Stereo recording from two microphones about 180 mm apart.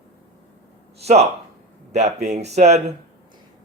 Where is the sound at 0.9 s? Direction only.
35° right (ahead or behind).